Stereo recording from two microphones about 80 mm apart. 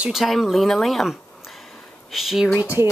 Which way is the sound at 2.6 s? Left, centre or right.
Right.